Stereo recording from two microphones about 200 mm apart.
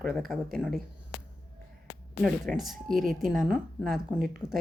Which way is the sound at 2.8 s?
45° right (ahead or behind).